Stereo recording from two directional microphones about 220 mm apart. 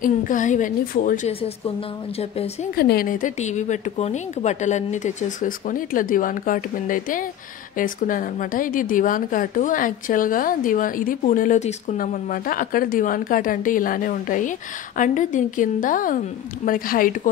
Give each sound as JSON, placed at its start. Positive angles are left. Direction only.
{"t": 0.0, "sound": "a woman's voice", "side_deg": 35}
{"t": 2.7, "sound": "a woman's voice", "side_deg": 45}